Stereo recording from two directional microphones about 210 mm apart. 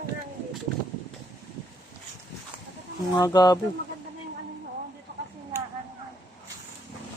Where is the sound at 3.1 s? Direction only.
20° left (ahead or behind).